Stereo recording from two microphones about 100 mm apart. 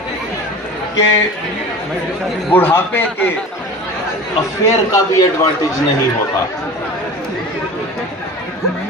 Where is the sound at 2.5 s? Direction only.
20° left (ahead or behind).